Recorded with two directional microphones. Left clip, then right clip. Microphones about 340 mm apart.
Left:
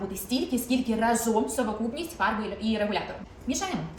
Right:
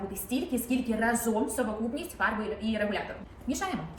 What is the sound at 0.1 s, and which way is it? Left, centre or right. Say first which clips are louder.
A woman's voice: left 3 dB; centre.